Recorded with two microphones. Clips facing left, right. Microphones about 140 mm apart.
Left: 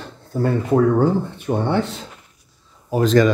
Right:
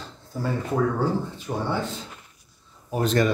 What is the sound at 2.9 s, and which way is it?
Speech, 90° left.